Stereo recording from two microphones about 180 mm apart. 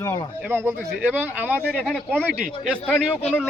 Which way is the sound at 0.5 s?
15° right (ahead or behind).